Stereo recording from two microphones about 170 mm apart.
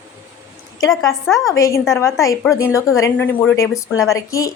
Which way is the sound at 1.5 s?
20° left (ahead or behind).